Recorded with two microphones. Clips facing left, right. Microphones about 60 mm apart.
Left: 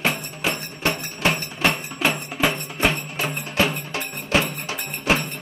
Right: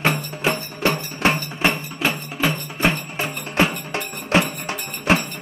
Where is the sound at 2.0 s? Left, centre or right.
Centre.